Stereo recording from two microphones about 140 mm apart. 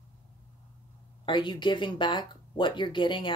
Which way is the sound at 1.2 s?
35° left (ahead or behind).